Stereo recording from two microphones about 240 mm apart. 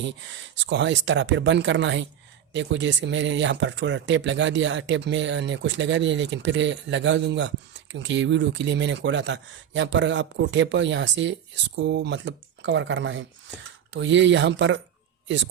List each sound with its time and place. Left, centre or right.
0.6 s speech: right